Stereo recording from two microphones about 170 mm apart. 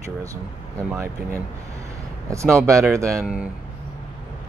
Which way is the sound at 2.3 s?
15° right (ahead or behind).